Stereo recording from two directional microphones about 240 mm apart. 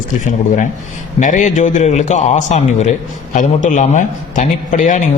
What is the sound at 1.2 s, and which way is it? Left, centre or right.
A man's voice, left.